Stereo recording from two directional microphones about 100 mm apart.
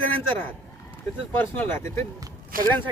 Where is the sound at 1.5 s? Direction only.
25° left (ahead or behind).